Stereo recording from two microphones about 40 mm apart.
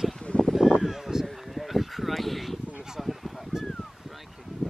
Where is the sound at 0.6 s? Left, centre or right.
Centre.